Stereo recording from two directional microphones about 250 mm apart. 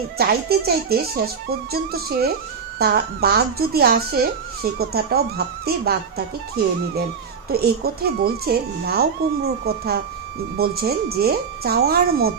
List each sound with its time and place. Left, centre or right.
0.2 s speech: right
7.5 s speech: right